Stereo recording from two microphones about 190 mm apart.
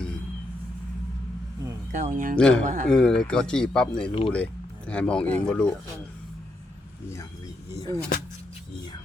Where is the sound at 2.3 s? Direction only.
5° left (ahead or behind).